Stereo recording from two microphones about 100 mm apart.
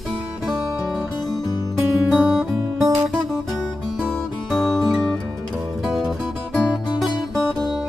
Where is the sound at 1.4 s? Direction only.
40° left (ahead or behind).